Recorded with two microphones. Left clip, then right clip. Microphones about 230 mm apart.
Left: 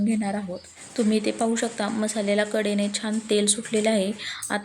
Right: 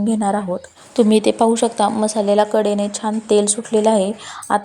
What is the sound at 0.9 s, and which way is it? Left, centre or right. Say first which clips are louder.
A woman's voice: right 10 dB; right.